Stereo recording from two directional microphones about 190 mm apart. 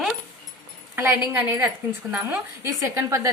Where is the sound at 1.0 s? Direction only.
10° right (ahead or behind).